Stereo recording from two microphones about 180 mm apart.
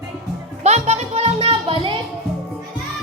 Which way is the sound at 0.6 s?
35° right (ahead or behind).